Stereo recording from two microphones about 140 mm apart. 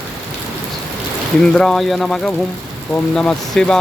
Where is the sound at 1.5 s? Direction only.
Centre (ahead or behind).